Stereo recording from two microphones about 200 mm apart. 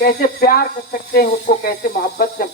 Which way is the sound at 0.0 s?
50° left (ahead or behind).